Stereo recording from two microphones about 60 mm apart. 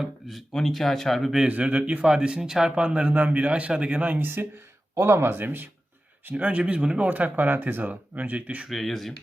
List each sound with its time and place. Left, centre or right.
0.0 s speech: centre
1.5 s speech: right
4.9 s speech: right
6.2 s speech: right
7.1 s speech: right
8.7 s speech: centre